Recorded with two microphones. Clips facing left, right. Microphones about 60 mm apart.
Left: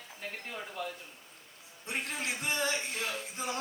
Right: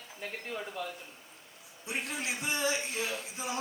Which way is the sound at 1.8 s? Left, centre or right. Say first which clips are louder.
Even; left.